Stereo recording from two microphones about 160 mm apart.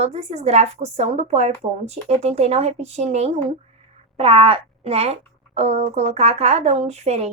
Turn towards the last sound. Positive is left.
turn(degrees=-40)  # may be behind; listen again after turning